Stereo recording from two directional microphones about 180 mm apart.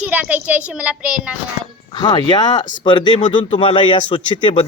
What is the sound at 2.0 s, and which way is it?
A man's voice, 25° left (ahead or behind).